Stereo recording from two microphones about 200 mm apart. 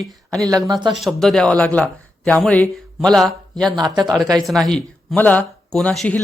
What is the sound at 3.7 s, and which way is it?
Speech, 20° right (ahead or behind).